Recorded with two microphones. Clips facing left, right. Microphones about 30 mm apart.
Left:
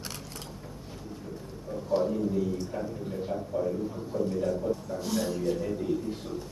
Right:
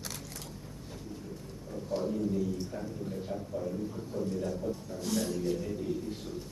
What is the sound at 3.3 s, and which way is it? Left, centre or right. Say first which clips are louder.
A man's voice: left 7 dB; left.